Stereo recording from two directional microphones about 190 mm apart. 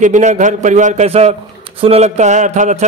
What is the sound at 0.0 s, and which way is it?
A man's voice, 40° right (ahead or behind).